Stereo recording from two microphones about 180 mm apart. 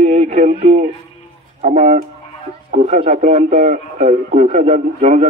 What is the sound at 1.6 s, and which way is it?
Speech, 40° right (ahead or behind).